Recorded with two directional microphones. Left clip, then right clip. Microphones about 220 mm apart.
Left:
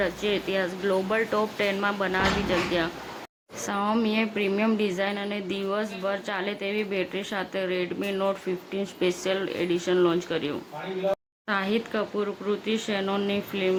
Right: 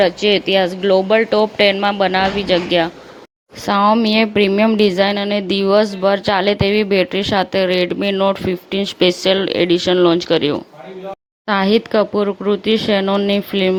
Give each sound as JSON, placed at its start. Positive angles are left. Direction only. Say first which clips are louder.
{"t": 0.0, "sound": "speech", "louder": "right 13 dB", "side_deg": -30}